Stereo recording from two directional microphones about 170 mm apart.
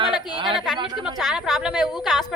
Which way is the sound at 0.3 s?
30° right (ahead or behind).